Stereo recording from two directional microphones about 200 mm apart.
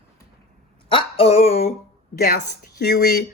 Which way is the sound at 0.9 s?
25° left (ahead or behind).